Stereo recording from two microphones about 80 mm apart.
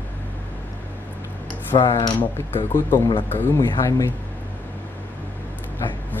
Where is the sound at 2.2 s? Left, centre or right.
Left.